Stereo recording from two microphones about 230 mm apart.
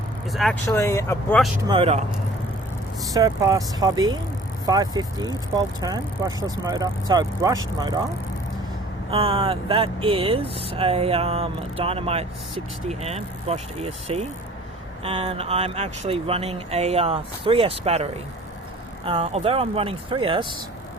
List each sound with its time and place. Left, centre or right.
0.3 s speech: centre
0.7 s speech: centre
1.6 s speech: right
3.0 s speech: centre
9.0 s speech: right